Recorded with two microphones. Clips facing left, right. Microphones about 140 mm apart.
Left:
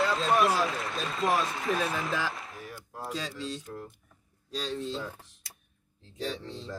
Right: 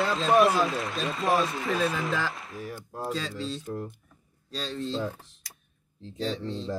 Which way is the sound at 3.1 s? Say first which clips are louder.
Right 2 dB; 10° left (ahead or behind).